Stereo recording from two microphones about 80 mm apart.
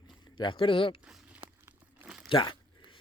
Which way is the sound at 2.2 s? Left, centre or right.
Left.